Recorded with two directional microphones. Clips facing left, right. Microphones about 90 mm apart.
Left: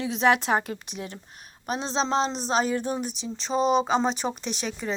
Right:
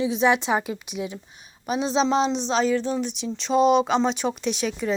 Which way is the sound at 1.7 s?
35° left (ahead or behind).